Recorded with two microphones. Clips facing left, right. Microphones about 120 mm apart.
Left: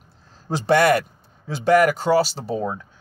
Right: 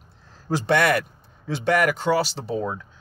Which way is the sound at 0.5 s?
30° left (ahead or behind).